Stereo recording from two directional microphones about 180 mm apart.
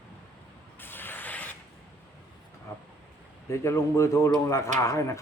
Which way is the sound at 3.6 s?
15° left (ahead or behind).